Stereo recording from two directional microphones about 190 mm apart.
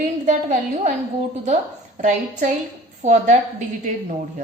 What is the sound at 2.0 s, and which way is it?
A woman's voice, 40° right (ahead or behind).